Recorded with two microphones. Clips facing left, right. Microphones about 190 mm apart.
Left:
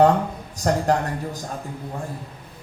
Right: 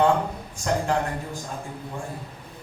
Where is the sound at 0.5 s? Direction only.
40° left (ahead or behind).